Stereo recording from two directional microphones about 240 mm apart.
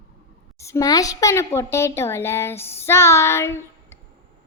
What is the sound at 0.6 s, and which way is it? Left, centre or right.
A woman's voice, centre.